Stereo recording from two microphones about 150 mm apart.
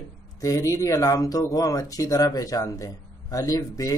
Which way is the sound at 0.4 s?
20° left (ahead or behind).